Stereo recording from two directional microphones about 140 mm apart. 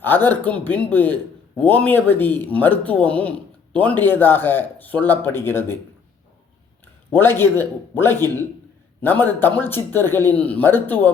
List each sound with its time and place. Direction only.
0.0 s a man's voice: 15° left (ahead or behind)
7.1 s a man's voice: 15° left (ahead or behind)